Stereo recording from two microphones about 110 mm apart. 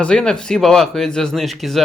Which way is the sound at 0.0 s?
5° left (ahead or behind).